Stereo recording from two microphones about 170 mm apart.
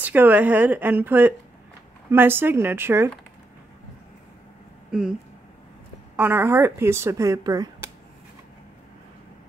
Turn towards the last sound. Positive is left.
turn(degrees=-25)  # may be behind; listen again after turning